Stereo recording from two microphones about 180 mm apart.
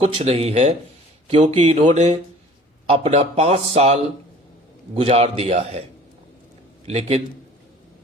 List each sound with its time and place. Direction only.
0.0 s speech: 35° right (ahead or behind)
6.8 s speech: 35° right (ahead or behind)